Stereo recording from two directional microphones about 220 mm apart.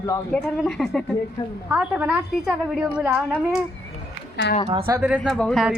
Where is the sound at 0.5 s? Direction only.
Centre (ahead or behind).